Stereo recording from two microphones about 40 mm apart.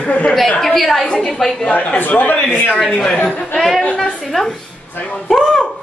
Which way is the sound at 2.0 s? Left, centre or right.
Left.